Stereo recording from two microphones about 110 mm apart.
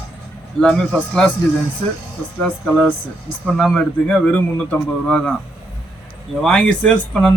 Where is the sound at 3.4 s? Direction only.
5° left (ahead or behind).